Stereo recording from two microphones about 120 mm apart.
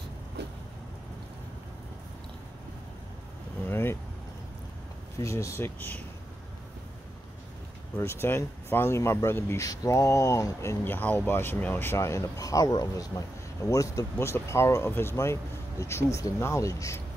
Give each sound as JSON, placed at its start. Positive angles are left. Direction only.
{"t": 3.6, "sound": "vehicle", "side_deg": 20}
{"t": 5.2, "sound": "speech", "side_deg": 25}
{"t": 8.0, "sound": "speech", "side_deg": 20}